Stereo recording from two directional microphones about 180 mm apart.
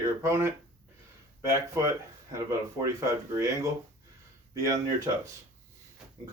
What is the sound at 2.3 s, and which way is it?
Speech, 20° right (ahead or behind).